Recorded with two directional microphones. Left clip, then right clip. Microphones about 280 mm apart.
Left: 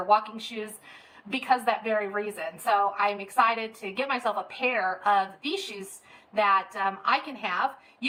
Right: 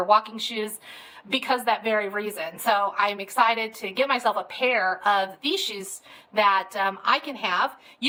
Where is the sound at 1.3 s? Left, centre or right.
Right.